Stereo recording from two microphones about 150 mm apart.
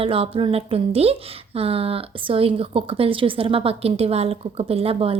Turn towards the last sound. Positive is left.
turn(degrees=-40)  # may be behind; listen again after turning